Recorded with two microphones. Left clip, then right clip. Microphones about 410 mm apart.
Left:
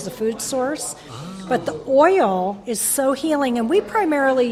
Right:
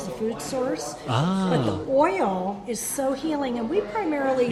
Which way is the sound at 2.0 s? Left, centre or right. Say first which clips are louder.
Left 7 dB; left.